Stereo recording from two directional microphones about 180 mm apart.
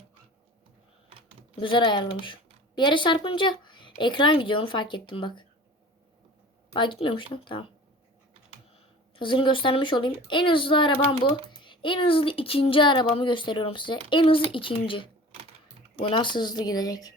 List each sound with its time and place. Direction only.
1.5 s speech: 25° left (ahead or behind)
6.7 s speech: 25° left (ahead or behind)
9.1 s speech: 25° left (ahead or behind)